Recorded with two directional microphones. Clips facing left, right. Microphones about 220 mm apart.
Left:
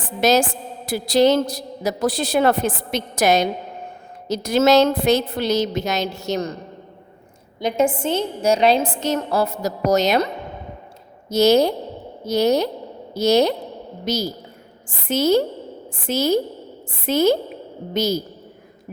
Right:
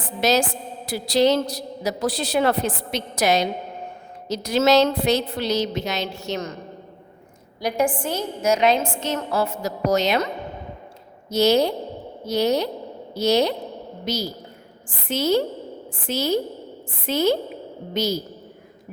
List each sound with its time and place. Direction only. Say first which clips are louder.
0.0 s a woman's voice: left 3 dB; 50° left (ahead or behind)
7.6 s a woman's voice: left 3 dB; 25° left (ahead or behind); by 10.2 s 40° left (ahead or behind)
11.3 s a woman's voice: left 3 dB; 45° left (ahead or behind)